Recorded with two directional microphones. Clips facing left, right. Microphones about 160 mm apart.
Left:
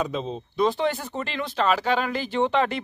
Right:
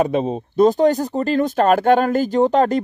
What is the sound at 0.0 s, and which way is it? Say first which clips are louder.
Speech: right 9 dB; 60° right (ahead or behind).